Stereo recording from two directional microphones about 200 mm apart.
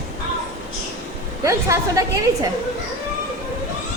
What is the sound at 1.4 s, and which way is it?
Speech, 15° right (ahead or behind).